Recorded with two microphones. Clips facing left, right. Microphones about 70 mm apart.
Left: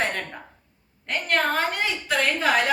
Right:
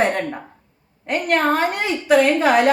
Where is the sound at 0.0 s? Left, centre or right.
Right.